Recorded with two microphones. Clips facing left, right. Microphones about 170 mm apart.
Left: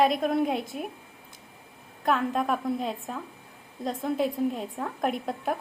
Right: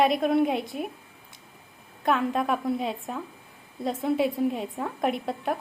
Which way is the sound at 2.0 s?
Centre (ahead or behind).